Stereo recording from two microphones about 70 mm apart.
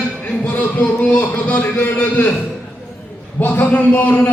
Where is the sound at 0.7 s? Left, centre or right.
Left.